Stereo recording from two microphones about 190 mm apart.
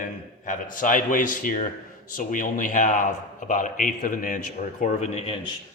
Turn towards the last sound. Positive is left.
turn(degrees=35)  # may be behind; listen again after turning